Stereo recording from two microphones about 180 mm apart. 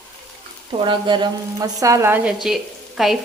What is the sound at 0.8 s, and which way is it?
A woman's voice, 25° right (ahead or behind).